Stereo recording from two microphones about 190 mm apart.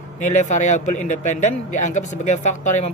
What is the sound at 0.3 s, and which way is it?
Speech, 40° left (ahead or behind).